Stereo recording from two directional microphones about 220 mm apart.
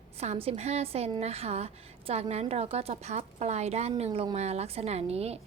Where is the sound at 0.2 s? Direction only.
30° right (ahead or behind).